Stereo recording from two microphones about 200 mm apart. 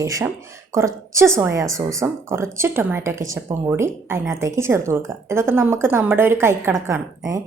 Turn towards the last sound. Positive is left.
turn(degrees=-15)  # may be behind; listen again after turning